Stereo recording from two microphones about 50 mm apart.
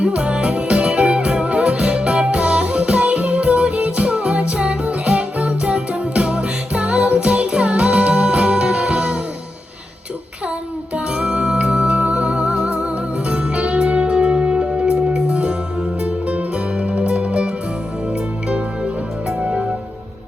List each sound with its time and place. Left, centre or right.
0.0 s music: right
10.9 s music: right